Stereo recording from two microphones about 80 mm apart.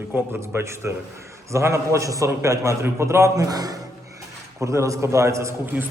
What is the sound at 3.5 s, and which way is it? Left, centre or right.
Speech, right.